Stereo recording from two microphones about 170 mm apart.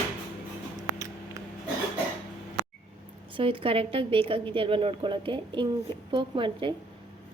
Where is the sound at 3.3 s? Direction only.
30° right (ahead or behind).